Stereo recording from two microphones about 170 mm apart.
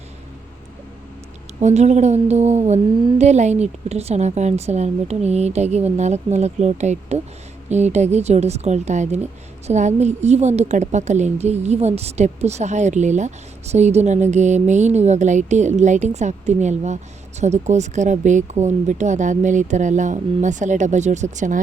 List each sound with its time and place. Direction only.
1.5 s a woman's voice: 40° right (ahead or behind)